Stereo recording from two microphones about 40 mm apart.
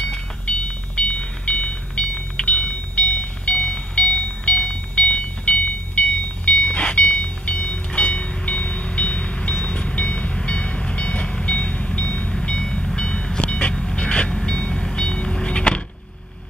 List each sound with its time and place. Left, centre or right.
0.0 s music: left
9.7 s train: left
12.4 s train: centre
13.7 s train: centre
14.0 s train: left
14.4 s vehicle: centre